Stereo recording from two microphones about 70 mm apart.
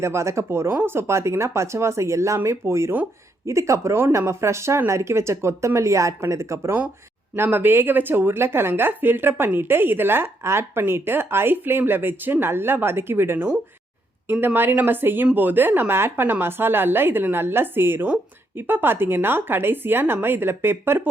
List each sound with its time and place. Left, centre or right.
0.0 s speech: right
7.3 s a woman's voice: right